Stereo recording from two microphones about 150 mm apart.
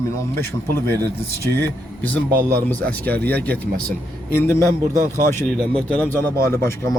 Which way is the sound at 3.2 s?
10° left (ahead or behind).